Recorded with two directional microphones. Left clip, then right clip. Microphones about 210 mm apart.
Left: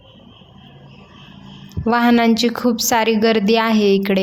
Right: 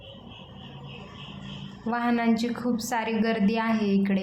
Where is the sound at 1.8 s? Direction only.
40° left (ahead or behind).